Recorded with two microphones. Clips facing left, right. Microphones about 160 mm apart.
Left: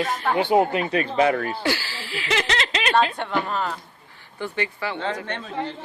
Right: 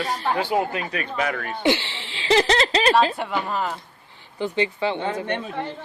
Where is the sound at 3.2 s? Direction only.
10° right (ahead or behind).